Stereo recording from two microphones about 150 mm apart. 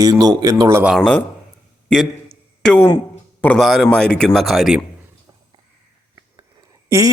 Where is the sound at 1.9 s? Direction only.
5° left (ahead or behind).